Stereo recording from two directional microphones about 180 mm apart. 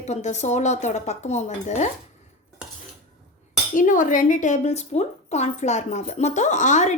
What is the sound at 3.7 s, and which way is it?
Speech, 45° left (ahead or behind).